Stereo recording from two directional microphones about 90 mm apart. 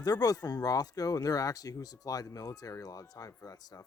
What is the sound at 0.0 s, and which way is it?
Speech, 45° left (ahead or behind).